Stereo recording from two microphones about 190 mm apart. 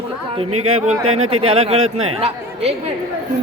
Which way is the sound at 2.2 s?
30° right (ahead or behind).